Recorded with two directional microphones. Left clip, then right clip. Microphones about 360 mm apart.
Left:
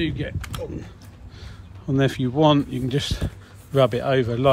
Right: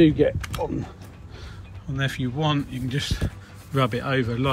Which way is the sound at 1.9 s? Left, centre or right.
Centre.